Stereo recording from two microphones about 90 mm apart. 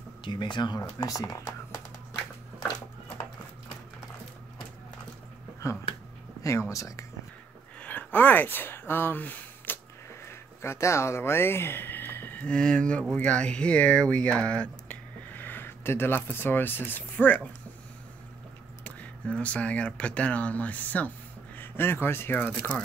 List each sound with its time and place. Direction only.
0.2 s speech: 60° left (ahead or behind); by 1.8 s 40° left (ahead or behind)
6.4 s speech: 35° left (ahead or behind)
7.8 s a sound: 20° left (ahead or behind)
10.2 s a sound: 30° left (ahead or behind)
12.4 s speech: 10° left (ahead or behind)
18.9 s speech: 15° left (ahead or behind)